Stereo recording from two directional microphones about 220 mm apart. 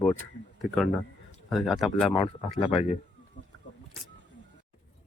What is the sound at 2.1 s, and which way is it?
Speech, 25° left (ahead or behind).